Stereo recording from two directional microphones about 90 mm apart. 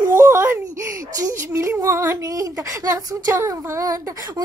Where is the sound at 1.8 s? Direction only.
40° right (ahead or behind).